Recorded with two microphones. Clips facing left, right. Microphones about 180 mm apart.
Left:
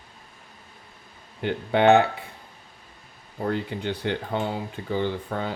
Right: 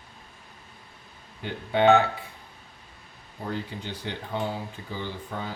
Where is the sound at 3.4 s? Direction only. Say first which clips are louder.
Left 6 dB; 65° left (ahead or behind).